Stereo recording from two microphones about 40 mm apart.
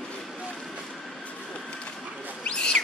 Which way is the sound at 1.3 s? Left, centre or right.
Left.